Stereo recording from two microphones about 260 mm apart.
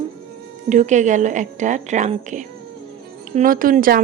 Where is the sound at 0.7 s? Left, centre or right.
Right.